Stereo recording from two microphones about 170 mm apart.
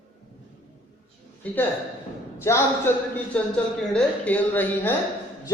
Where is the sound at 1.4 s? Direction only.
10° left (ahead or behind).